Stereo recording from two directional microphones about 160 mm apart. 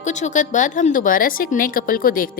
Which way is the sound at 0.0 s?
50° left (ahead or behind).